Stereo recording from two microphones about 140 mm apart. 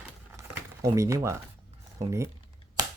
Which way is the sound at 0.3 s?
25° right (ahead or behind).